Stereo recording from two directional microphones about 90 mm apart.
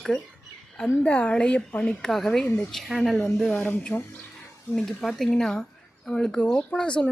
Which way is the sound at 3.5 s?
20° left (ahead or behind).